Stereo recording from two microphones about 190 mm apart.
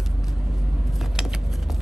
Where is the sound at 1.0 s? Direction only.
Centre (ahead or behind).